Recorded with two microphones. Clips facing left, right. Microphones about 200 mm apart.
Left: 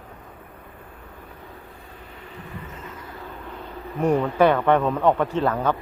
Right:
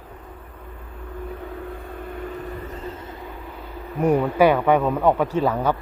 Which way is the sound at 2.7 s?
35° right (ahead or behind).